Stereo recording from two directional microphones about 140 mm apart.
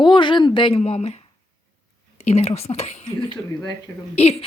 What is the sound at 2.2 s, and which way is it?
Speech, 50° left (ahead or behind).